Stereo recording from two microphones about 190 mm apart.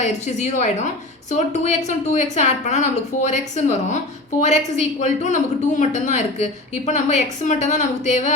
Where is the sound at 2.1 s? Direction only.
40° left (ahead or behind).